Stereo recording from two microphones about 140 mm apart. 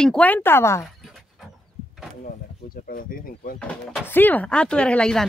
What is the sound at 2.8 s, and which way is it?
Speech, 90° left.